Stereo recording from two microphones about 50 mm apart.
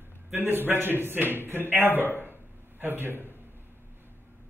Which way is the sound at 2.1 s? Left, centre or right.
Right.